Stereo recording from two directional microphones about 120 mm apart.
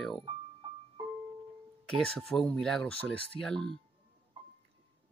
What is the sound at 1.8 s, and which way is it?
Speech, centre (ahead or behind).